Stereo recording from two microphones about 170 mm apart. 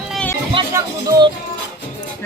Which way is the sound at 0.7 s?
20° right (ahead or behind).